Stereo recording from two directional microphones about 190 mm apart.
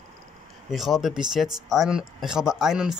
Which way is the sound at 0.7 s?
Centre (ahead or behind).